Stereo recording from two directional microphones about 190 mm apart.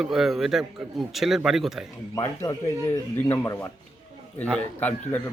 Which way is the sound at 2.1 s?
20° left (ahead or behind).